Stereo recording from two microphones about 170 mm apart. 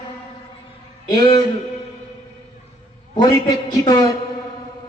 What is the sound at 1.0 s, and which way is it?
Speech, 25° left (ahead or behind).